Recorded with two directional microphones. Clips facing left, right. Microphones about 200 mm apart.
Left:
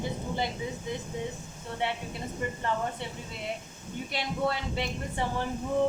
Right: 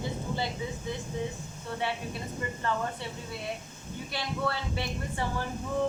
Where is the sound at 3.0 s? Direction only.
20° left (ahead or behind).